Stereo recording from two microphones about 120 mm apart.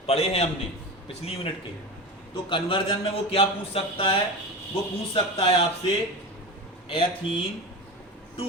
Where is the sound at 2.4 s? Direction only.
45° left (ahead or behind).